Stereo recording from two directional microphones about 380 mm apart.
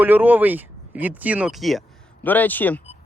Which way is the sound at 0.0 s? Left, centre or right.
Centre.